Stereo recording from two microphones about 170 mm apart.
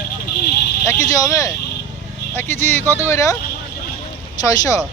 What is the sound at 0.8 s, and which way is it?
Speech, 20° left (ahead or behind).